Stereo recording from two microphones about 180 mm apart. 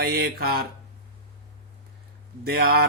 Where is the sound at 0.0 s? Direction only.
60° right (ahead or behind).